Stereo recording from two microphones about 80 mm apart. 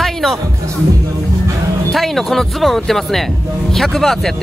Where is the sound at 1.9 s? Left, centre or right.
Centre.